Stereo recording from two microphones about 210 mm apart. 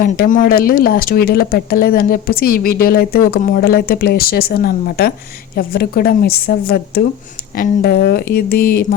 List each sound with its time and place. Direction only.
0.0 s speech: 40° left (ahead or behind)